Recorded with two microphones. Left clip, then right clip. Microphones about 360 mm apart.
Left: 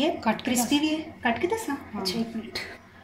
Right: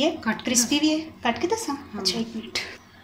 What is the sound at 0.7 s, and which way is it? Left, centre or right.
Speech, centre.